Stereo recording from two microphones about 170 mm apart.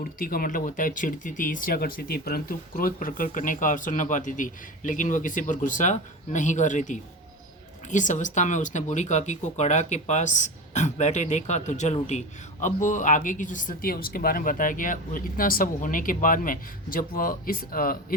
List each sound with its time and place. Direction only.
0.0 s speech: 55° left (ahead or behind)